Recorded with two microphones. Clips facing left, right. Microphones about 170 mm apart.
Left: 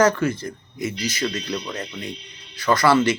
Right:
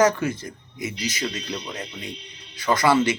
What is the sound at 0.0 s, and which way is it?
Speech, 15° right (ahead or behind).